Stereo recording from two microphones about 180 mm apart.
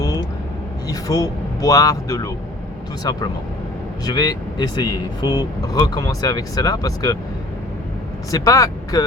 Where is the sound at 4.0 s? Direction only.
20° left (ahead or behind).